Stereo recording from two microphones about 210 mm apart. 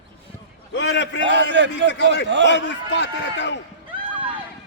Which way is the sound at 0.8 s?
55° left (ahead or behind).